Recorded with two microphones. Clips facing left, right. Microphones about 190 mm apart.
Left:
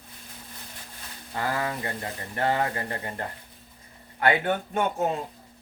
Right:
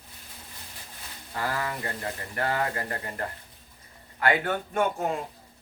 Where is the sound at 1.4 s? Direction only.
20° left (ahead or behind).